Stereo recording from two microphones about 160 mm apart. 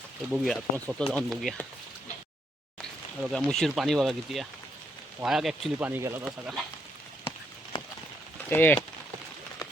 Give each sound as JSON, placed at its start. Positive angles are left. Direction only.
{"t": 0.3, "sound": "speech", "side_deg": 0}
{"t": 3.2, "sound": "speech", "side_deg": 0}
{"t": 5.9, "sound": "speech", "side_deg": -15}
{"t": 7.7, "sound": "horse", "side_deg": 30}
{"t": 8.4, "sound": "speech", "side_deg": 10}